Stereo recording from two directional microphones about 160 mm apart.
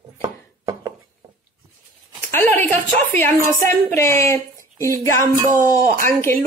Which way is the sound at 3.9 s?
15° left (ahead or behind).